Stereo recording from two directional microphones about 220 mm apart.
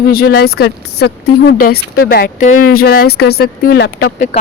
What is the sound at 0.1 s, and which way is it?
Speech, 45° left (ahead or behind).